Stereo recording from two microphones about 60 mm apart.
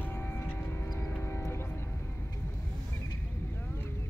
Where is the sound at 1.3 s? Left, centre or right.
Left.